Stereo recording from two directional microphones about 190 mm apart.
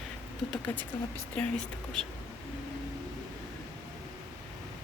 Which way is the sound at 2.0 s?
5° left (ahead or behind).